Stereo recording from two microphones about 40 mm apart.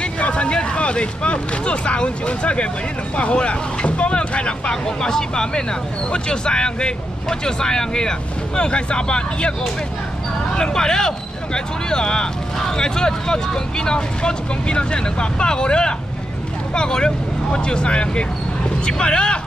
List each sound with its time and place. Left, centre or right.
0.0 s speech: left
10.5 s speech: centre